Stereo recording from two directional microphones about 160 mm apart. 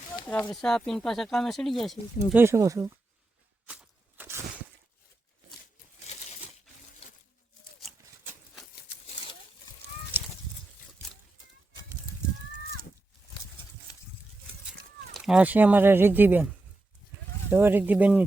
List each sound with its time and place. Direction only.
0.3 s speech: 5° left (ahead or behind)
2.3 s speech: 15° right (ahead or behind)
3.7 s walk: 10° right (ahead or behind)
10.1 s a sound: 10° right (ahead or behind)
14.7 s speech: 5° right (ahead or behind)
17.5 s speech: 15° right (ahead or behind)